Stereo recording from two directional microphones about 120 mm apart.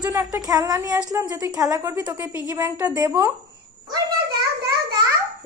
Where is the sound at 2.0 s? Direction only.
20° right (ahead or behind).